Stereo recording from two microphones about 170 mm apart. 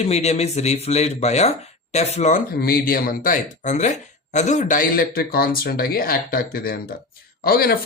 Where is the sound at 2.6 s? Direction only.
60° left (ahead or behind).